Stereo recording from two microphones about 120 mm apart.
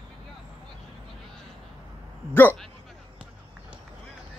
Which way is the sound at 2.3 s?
15° left (ahead or behind).